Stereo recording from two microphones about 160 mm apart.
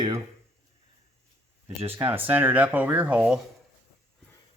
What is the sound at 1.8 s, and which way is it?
Speech, 15° right (ahead or behind).